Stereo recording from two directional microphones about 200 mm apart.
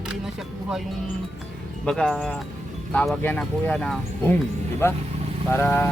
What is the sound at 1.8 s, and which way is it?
Speech, 5° left (ahead or behind).